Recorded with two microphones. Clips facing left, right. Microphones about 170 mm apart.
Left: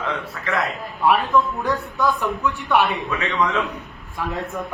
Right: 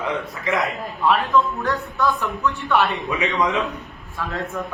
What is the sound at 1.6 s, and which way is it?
Speech, 10° left (ahead or behind).